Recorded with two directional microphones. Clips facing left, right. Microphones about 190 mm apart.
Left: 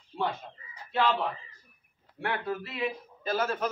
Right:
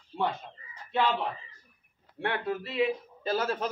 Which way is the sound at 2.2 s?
30° right (ahead or behind).